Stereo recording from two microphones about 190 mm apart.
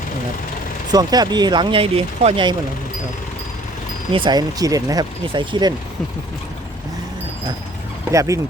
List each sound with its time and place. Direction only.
0.9 s speech: 20° right (ahead or behind)
4.1 s speech: 25° right (ahead or behind)
8.1 s speech: 15° right (ahead or behind)